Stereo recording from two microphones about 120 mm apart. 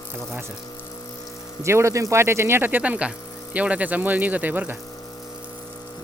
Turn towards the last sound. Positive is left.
turn(degrees=-15)  # may be behind; listen again after turning